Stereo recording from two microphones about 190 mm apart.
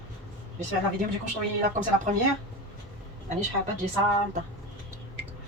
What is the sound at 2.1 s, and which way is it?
Speech, 45° right (ahead or behind).